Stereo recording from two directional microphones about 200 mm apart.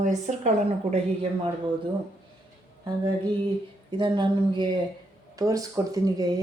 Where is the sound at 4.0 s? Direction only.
25° right (ahead or behind).